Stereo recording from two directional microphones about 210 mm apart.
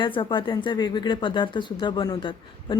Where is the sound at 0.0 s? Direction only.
25° left (ahead or behind).